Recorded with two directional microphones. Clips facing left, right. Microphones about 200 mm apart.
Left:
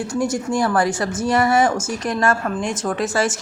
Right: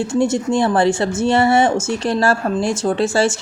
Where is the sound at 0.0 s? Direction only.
25° right (ahead or behind).